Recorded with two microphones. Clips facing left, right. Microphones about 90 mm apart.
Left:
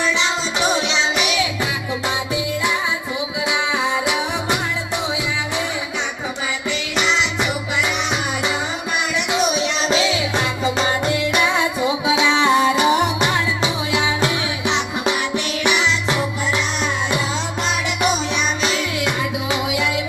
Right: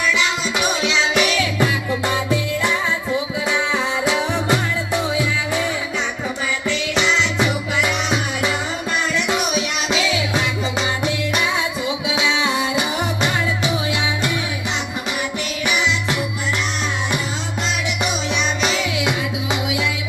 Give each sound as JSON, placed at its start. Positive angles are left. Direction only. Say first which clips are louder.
{"t": 0.2, "sound": "music", "louder": "even", "side_deg": 25}
{"t": 4.0, "sound": "music", "louder": "right 2 dB", "side_deg": 15}
{"t": 6.7, "sound": "music", "louder": "right 1 dB", "side_deg": 5}
{"t": 12.0, "sound": "music", "louder": "left 4 dB", "side_deg": 40}
{"t": 18.6, "sound": "music", "louder": "right 1 dB", "side_deg": -5}